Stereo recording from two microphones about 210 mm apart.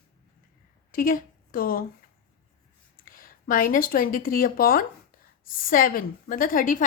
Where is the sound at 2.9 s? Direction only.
45° left (ahead or behind).